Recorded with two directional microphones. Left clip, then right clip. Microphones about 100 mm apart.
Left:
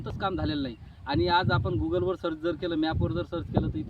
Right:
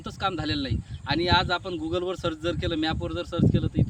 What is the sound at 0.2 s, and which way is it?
Speech, 25° right (ahead or behind).